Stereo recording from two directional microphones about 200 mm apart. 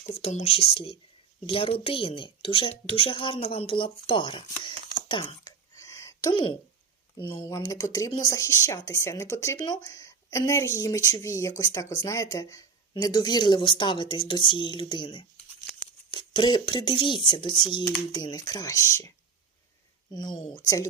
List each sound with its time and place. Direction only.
0.0 s speech: 30° left (ahead or behind); by 19.1 s 15° left (ahead or behind)